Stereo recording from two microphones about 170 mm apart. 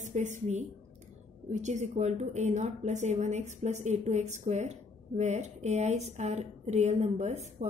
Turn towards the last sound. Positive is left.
turn(degrees=-40)  # may be behind; listen again after turning